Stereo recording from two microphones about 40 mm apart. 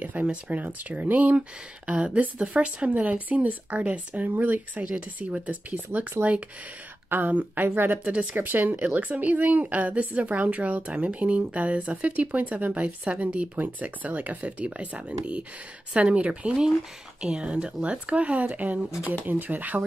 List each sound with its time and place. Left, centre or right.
0.2 s speech: right
2.9 s speech: right
4.3 s speech: right
4.9 s speech: right
6.2 s speech: right
7.2 s speech: right
7.7 s a woman's voice: right
8.0 s speech: right
8.4 s speech: right
8.8 s speech: right